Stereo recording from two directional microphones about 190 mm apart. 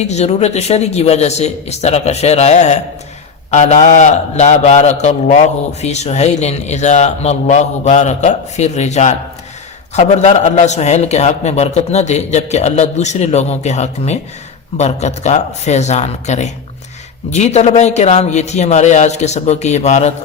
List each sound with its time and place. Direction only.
0.0 s a man's voice: 35° left (ahead or behind)